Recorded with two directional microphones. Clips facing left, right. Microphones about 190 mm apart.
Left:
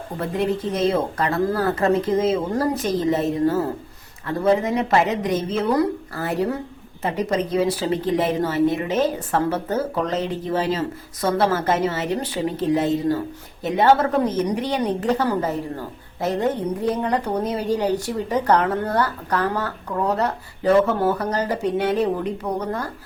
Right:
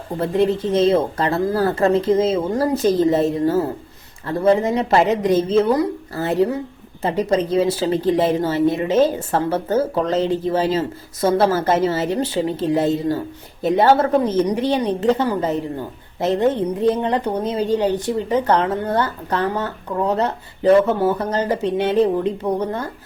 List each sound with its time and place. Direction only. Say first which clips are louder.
0.2 s a woman's voice: right 5 dB; 30° right (ahead or behind)